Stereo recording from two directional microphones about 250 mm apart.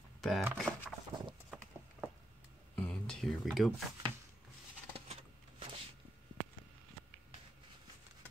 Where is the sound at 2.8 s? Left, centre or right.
Centre.